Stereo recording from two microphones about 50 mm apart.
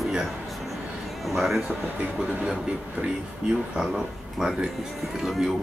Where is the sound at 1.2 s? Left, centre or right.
Centre.